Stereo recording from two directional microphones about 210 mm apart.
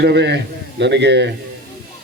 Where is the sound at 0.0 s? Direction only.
55° right (ahead or behind).